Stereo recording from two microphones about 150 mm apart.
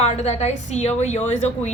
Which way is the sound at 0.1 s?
45° left (ahead or behind).